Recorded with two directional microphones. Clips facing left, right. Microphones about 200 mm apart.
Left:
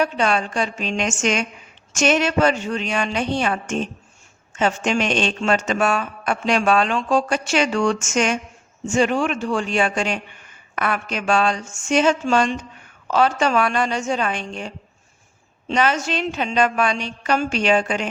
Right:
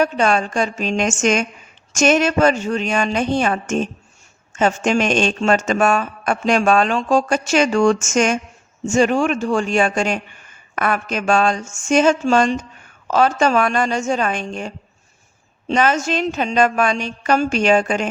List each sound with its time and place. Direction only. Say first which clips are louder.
0.0 s speech: right 3 dB; 45° right (ahead or behind)
15.7 s speech: right 3 dB; 45° right (ahead or behind)